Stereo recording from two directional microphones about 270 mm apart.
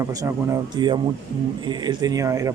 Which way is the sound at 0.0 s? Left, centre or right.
Centre.